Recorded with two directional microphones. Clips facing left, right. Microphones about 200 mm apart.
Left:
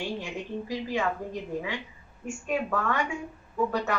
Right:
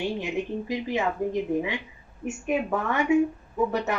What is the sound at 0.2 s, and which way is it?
A woman's voice, 20° right (ahead or behind).